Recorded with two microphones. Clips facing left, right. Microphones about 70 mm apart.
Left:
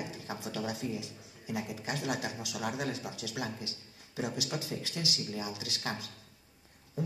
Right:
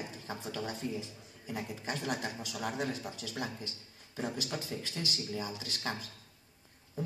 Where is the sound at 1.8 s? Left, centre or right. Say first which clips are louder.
Even; centre.